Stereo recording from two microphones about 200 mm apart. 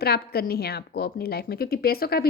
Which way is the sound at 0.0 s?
50° left (ahead or behind).